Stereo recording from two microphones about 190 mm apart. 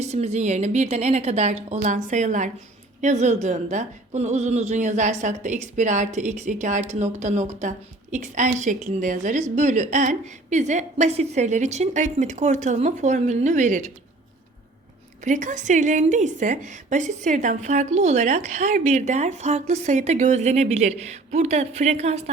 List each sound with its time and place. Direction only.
0.0 s speech: 35° right (ahead or behind)
15.2 s speech: 40° right (ahead or behind)